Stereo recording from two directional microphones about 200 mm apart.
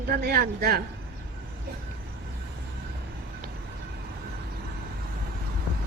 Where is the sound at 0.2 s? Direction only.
50° right (ahead or behind).